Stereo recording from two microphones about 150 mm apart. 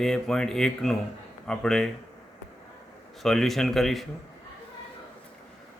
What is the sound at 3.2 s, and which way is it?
Speech, centre (ahead or behind).